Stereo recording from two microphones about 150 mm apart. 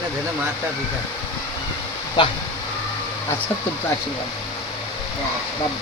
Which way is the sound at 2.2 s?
30° left (ahead or behind).